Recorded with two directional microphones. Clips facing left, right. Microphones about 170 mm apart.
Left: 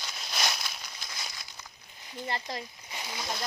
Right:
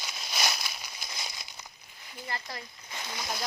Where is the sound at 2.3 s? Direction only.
20° left (ahead or behind).